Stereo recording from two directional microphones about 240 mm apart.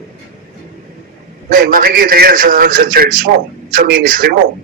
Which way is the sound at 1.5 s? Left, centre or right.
Right.